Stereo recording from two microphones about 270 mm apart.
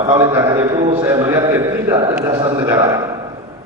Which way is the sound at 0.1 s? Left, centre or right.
Centre.